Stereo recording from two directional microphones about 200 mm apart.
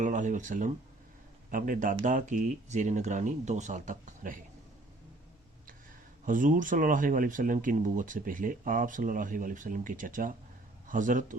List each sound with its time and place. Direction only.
0.0 s speech: 40° right (ahead or behind)
6.2 s speech: 40° right (ahead or behind)